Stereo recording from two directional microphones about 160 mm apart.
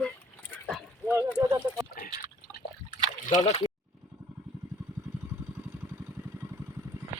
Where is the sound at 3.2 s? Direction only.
50° left (ahead or behind).